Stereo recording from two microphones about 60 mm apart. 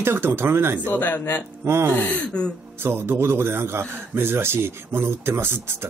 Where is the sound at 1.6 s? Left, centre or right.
Right.